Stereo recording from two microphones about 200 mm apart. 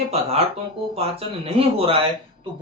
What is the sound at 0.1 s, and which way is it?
Speech, 30° right (ahead or behind).